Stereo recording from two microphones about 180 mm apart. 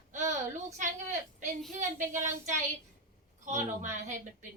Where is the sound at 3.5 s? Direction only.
45° right (ahead or behind).